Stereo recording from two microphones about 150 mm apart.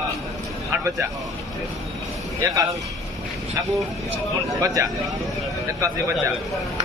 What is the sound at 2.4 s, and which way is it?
Speech, 20° right (ahead or behind).